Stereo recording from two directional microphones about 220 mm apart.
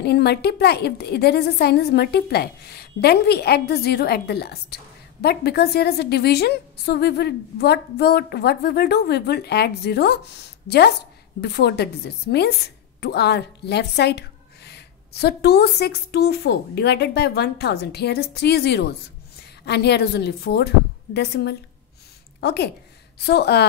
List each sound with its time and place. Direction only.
0.0 s a woman's voice: 45° left (ahead or behind)
11.4 s a woman's voice: 50° left (ahead or behind)